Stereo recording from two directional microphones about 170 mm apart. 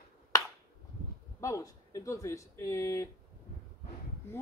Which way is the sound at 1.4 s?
20° left (ahead or behind).